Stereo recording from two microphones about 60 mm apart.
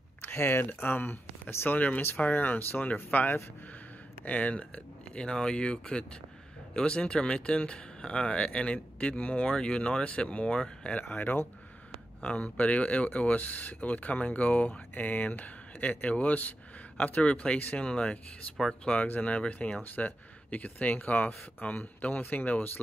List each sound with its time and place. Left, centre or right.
0.2 s speech: left
1.8 s speech: left
11.9 s speech: centre
19.8 s speech: left